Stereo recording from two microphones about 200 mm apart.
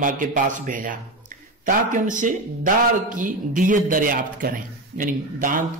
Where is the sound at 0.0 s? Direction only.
40° right (ahead or behind).